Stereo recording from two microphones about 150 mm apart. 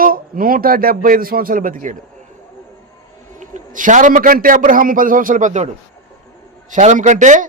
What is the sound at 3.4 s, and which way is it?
A man's voice, 60° right (ahead or behind).